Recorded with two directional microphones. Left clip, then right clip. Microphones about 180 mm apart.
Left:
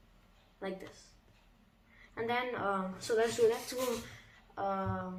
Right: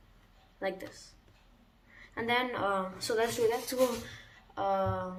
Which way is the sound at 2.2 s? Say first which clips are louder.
Right 4 dB; 35° right (ahead or behind).